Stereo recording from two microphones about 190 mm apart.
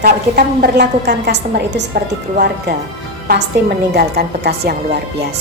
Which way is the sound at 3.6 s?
60° right (ahead or behind).